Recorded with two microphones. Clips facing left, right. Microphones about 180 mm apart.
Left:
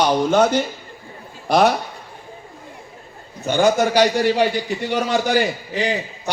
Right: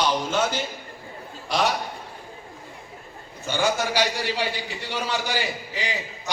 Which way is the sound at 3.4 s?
60° left (ahead or behind).